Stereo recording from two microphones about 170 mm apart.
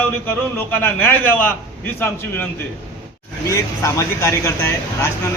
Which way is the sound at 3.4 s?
20° left (ahead or behind).